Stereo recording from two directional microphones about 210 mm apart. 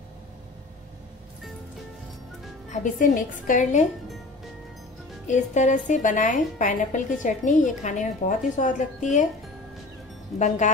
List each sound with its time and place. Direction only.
2.7 s a woman's voice: 40° left (ahead or behind)
5.2 s a woman's voice: 35° left (ahead or behind)